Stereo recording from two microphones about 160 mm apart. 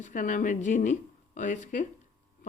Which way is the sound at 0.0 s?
55° left (ahead or behind).